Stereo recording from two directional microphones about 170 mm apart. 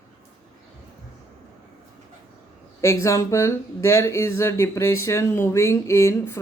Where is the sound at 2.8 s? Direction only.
15° left (ahead or behind).